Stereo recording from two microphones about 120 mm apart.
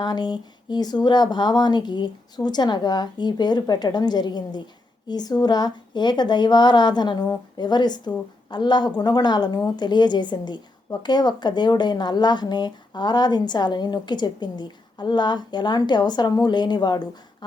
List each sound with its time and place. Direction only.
0.0 s speech: 35° left (ahead or behind)